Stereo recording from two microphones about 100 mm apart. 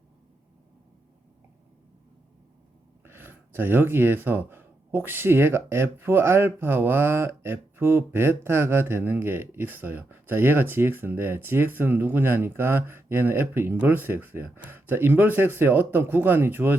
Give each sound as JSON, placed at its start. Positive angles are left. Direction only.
{"t": 3.0, "sound": "speech", "side_deg": -20}